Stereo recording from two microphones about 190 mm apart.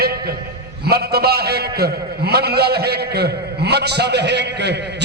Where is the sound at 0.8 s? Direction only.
55° right (ahead or behind).